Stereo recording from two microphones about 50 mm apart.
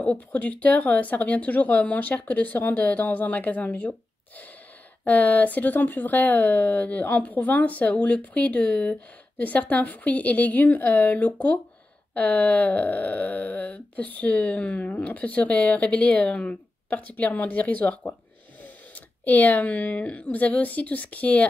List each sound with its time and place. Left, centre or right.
0.3 s speech: left
5.0 s speech: left